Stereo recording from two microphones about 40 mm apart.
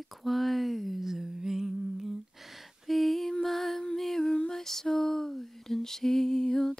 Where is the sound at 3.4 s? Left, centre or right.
Centre.